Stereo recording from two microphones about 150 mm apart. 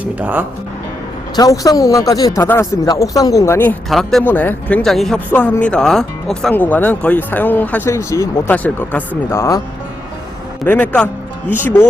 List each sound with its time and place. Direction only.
0.0 s speech: 10° right (ahead or behind)
1.4 s speech: 25° left (ahead or behind)
3.8 s speech: centre (ahead or behind)
4.2 s speech: 10° left (ahead or behind)
10.7 s speech: 10° left (ahead or behind)